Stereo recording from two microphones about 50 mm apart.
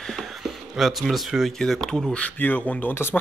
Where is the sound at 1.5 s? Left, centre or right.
Centre.